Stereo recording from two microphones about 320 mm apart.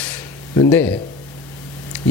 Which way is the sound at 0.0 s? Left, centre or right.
Centre.